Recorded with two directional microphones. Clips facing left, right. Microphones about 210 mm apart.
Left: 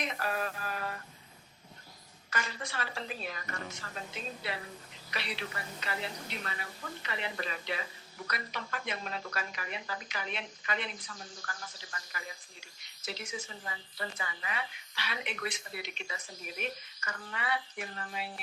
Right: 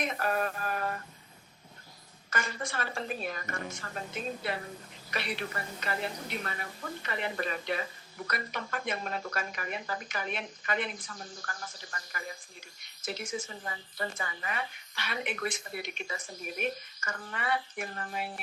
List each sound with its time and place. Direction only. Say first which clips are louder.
0.0 s a woman's voice: right 4 dB; 50° right (ahead or behind)
2.3 s a woman's voice: right 3 dB; 50° right (ahead or behind)